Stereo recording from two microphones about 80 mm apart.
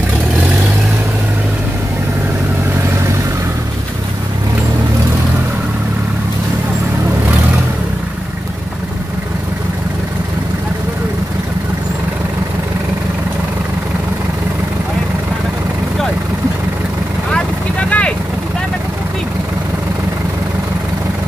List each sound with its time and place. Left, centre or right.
17.8 s vehicle: centre